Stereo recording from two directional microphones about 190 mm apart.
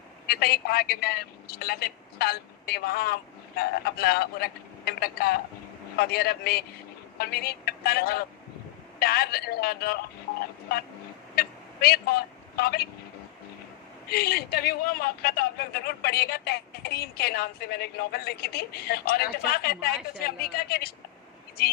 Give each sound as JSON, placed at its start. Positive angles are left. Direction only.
{"t": 0.3, "sound": "a man's voice", "side_deg": 55}
{"t": 11.3, "sound": "vehicle", "side_deg": 55}
{"t": 12.5, "sound": "a man's voice", "side_deg": 55}
{"t": 14.1, "sound": "a man's voice", "side_deg": 55}